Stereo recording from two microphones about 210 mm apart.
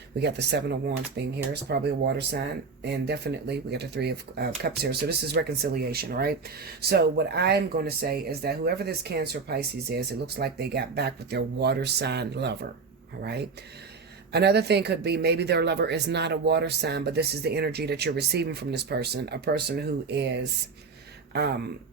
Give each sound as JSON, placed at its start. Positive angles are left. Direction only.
{"t": 0.2, "sound": "speech", "side_deg": -55}
{"t": 14.3, "sound": "speech", "side_deg": -50}